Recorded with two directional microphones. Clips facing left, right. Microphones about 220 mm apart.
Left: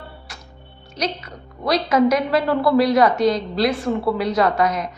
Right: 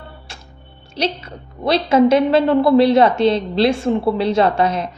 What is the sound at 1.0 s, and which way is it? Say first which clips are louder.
A woman's voice: right 4 dB; 30° right (ahead or behind).